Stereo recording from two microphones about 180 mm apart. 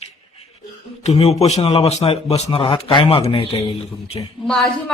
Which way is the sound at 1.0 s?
35° left (ahead or behind).